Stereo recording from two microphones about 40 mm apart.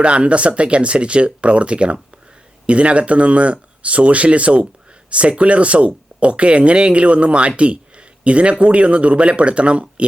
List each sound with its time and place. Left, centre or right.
0.0 s speech: right